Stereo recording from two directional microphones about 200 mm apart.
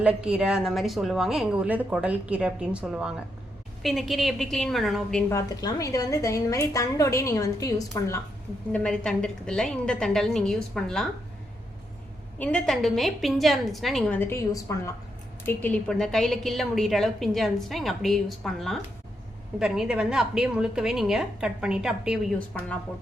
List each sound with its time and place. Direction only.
0.0 s a woman's voice: 5° right (ahead or behind)
5.3 s a woman's voice: 15° left (ahead or behind)
8.7 s a woman's voice: 5° left (ahead or behind)
12.4 s a woman's voice: 5° left (ahead or behind)